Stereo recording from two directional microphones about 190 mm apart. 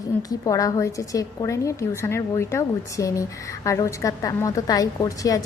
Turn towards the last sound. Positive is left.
turn(degrees=20)  # may be behind; listen again after turning